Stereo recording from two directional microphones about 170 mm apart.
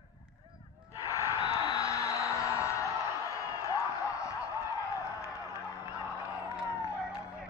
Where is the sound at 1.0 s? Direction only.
20° left (ahead or behind).